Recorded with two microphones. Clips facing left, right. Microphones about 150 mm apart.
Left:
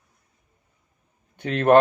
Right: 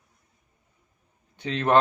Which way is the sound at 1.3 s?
55° left (ahead or behind).